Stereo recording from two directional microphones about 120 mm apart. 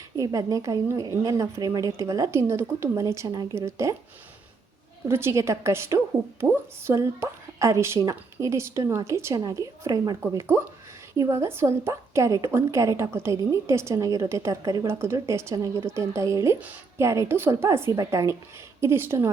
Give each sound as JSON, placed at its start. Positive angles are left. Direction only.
{"t": 0.2, "sound": "a woman's voice", "side_deg": -25}
{"t": 5.0, "sound": "a woman's voice", "side_deg": -20}